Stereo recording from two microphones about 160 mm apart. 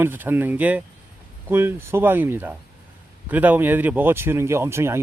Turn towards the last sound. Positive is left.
turn(degrees=-15)  # may be behind; listen again after turning